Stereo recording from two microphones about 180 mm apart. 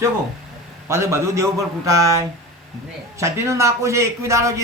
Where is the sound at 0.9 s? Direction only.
15° right (ahead or behind).